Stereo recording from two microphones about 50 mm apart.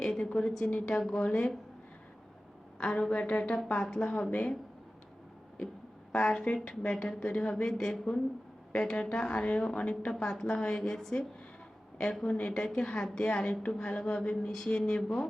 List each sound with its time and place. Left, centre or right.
0.0 s a sound: centre
0.3 s a woman's voice: centre
0.9 s speech: centre
2.7 s a woman's voice: centre
3.7 s speech: centre
4.3 s a woman's voice: left
6.1 s a woman's voice: left
10.1 s a woman's voice: centre
12.3 s speech: left
13.4 s a woman's voice: left
13.7 s a woman's voice: centre